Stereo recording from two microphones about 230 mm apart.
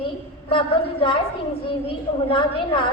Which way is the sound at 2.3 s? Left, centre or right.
Left.